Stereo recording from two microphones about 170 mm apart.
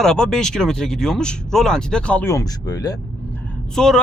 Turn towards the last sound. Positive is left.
turn(degrees=5)  # may be behind; listen again after turning